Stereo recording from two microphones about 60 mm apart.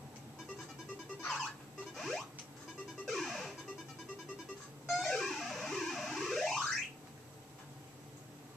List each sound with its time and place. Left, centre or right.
2.0 s a sound: centre
3.1 s music: centre
4.8 s music: centre